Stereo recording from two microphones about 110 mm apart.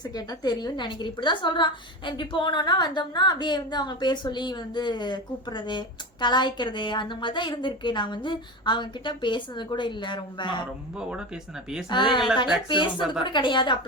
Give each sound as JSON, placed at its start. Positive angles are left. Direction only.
{"t": 0.0, "sound": "a woman's voice", "side_deg": 40}
{"t": 10.9, "sound": "speech", "side_deg": -10}
{"t": 11.9, "sound": "a woman's voice", "side_deg": 45}